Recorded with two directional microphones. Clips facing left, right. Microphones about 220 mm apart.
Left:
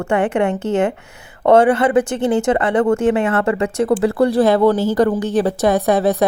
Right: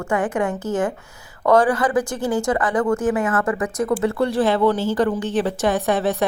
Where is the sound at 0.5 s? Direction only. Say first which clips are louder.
Left 5 dB; 60° left (ahead or behind).